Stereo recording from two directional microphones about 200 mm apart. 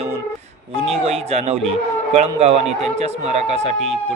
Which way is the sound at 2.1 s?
30° right (ahead or behind).